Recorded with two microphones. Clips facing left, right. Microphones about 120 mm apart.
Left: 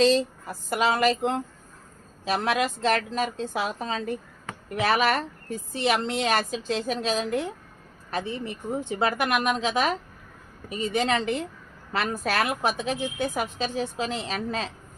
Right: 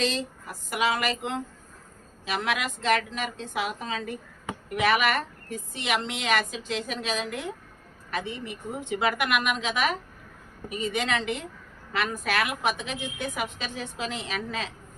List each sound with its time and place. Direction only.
0.7 s a woman's voice: 35° left (ahead or behind)